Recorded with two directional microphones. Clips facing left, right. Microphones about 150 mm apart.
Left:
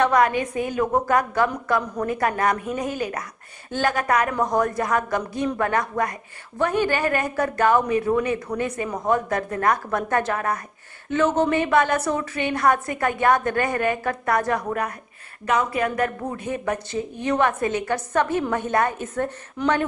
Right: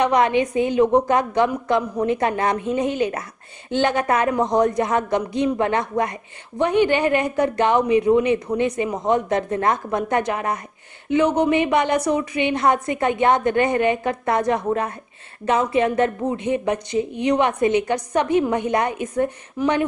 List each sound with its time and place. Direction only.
0.0 s a woman's voice: 20° right (ahead or behind)